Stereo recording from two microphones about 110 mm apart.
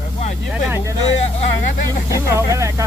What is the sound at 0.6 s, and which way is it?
Speech, 20° right (ahead or behind).